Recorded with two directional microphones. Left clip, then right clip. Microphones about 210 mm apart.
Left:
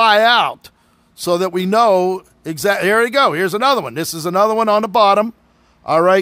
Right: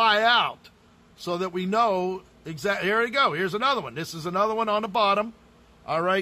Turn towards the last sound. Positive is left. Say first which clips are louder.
# left 12 dB
turn(degrees=50)  # may be behind; listen again after turning